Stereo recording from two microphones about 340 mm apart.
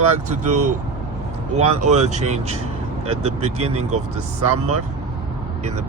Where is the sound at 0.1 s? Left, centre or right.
Right.